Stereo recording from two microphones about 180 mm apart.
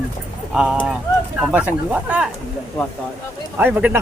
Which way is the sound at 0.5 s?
5° right (ahead or behind).